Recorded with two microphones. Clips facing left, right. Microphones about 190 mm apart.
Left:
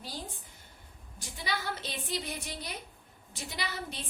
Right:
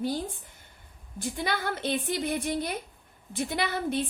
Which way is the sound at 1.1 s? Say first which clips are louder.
Right 7 dB; 55° right (ahead or behind).